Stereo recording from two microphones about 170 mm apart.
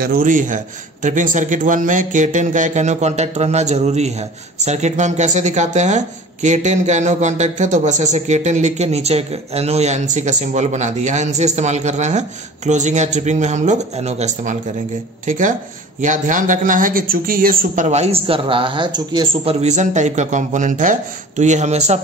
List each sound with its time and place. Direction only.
0.0 s speech: 55° right (ahead or behind)